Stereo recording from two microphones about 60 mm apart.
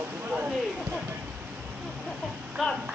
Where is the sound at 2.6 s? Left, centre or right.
Centre.